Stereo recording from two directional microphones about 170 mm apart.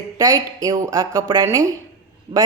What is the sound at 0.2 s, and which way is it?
A woman's voice, 20° right (ahead or behind).